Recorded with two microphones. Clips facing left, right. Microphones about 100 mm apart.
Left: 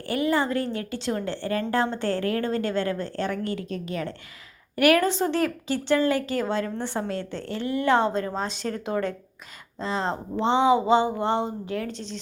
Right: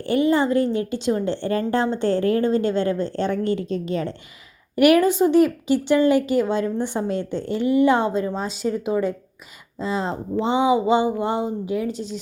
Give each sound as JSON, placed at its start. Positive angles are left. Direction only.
{"t": 0.0, "sound": "a woman's voice", "side_deg": -25}
{"t": 4.8, "sound": "speech", "side_deg": -15}